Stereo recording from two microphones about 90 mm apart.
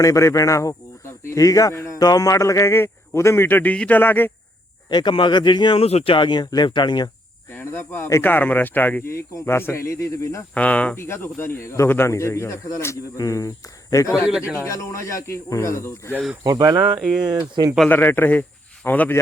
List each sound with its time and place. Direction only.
0.0 s a man's voice: 35° left (ahead or behind)
4.9 s speech: 55° left (ahead or behind)
7.5 s speech: 25° left (ahead or behind)
10.5 s speech: 15° left (ahead or behind)
10.9 s a man's voice: 30° left (ahead or behind)
14.6 s a man's voice: 35° left (ahead or behind)
16.4 s speech: 45° right (ahead or behind)
17.0 s speech: 5° right (ahead or behind)
17.2 s speech: 50° right (ahead or behind)
17.8 s speech: 20° left (ahead or behind)